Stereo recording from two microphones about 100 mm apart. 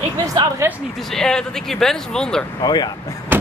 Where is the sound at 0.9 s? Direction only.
5° left (ahead or behind).